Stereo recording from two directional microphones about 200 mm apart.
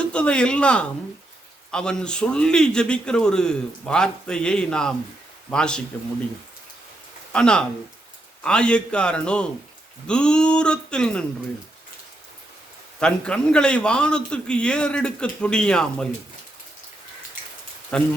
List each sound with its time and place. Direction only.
0.0 s a man's voice: 5° left (ahead or behind)
7.3 s a man's voice: 5° left (ahead or behind)
13.0 s a man's voice: 5° left (ahead or behind)
17.9 s a man's voice: 5° left (ahead or behind)